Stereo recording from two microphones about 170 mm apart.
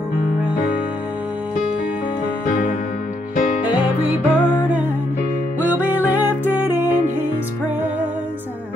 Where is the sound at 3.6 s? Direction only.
5° right (ahead or behind).